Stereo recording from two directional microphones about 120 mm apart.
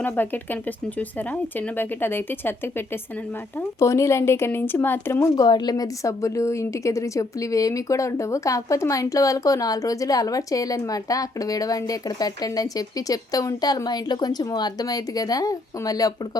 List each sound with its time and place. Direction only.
0.2 s a woman's voice: 15° left (ahead or behind)
5.4 s a woman's voice: 35° left (ahead or behind)